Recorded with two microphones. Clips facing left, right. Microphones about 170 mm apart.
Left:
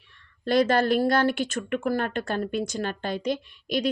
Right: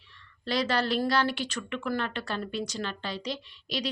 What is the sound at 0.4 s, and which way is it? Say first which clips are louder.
Speech: left 7 dB; 50° left (ahead or behind).